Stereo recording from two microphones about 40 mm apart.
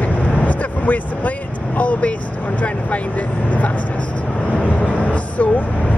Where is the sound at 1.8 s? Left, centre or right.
Left.